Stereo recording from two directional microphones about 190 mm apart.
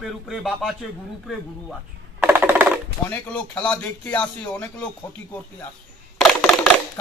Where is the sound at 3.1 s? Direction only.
5° left (ahead or behind).